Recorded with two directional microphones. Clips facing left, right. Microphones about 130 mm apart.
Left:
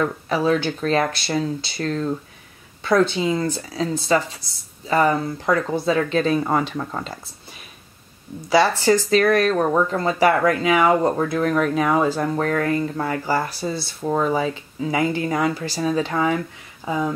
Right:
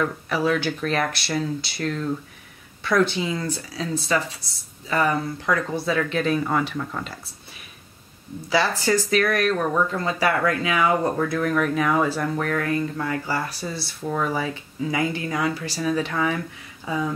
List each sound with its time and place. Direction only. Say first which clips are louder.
0.0 s speech: left 2 dB; 25° left (ahead or behind)
8.8 s speech: left 4 dB; 30° left (ahead or behind)
12.4 s speech: left 3 dB; 35° left (ahead or behind)